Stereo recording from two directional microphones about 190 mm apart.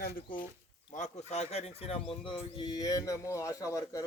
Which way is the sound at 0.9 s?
40° left (ahead or behind).